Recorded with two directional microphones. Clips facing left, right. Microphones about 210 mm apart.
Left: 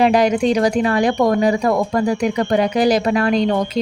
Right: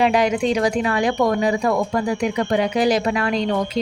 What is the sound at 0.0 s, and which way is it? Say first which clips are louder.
Speech: left 3 dB; 40° left (ahead or behind).